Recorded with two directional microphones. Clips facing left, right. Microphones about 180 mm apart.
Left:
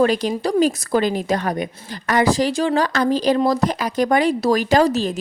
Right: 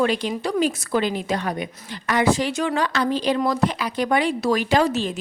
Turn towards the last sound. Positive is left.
turn(degrees=40)  # may be behind; listen again after turning